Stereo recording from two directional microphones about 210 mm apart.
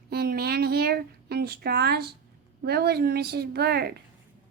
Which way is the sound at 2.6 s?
50° right (ahead or behind).